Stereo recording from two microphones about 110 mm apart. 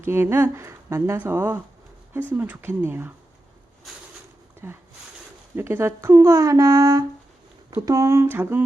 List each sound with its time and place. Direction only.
0.0 s speech: 20° right (ahead or behind)
4.6 s speech: 20° right (ahead or behind)